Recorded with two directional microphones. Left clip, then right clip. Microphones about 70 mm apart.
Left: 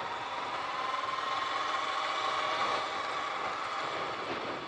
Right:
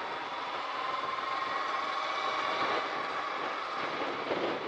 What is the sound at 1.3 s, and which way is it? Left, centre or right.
Vehicle, left.